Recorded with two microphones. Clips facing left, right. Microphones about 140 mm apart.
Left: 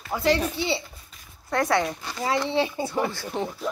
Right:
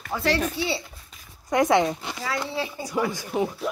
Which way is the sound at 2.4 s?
25° left (ahead or behind).